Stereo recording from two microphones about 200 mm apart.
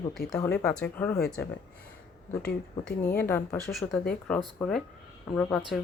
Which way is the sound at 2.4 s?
5° left (ahead or behind).